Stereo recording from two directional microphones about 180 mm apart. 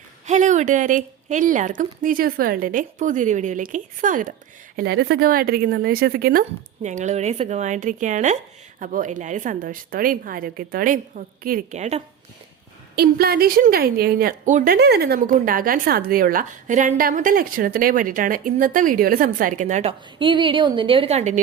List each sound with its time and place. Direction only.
0.3 s a woman's voice: 40° right (ahead or behind)
4.8 s a woman's voice: 60° right (ahead or behind)
6.8 s a woman's voice: 40° right (ahead or behind)
13.0 s a woman's voice: 60° right (ahead or behind); by 21.4 s 40° right (ahead or behind)